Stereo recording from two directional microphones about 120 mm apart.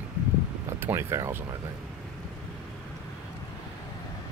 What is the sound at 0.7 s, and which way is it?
Speech, 20° right (ahead or behind).